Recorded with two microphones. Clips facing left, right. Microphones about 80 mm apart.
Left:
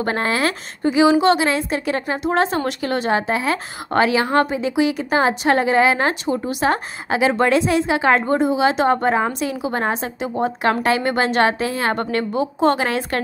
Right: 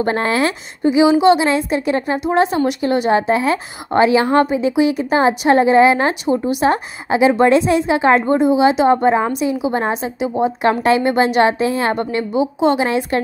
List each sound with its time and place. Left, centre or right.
0.0 s a woman's voice: right
10.6 s a woman's voice: right; by 12.8 s centre
12.8 s a woman's voice: right